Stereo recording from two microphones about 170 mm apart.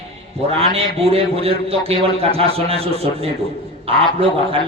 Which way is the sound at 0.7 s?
35° right (ahead or behind).